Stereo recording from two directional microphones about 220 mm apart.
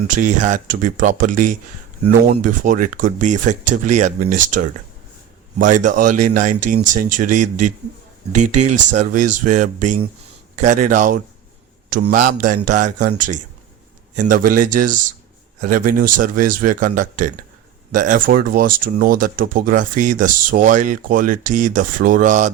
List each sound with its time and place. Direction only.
0.1 s a man's voice: 35° right (ahead or behind)